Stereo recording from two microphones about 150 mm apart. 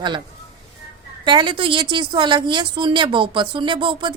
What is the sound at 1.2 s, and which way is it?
A woman's voice, 30° right (ahead or behind).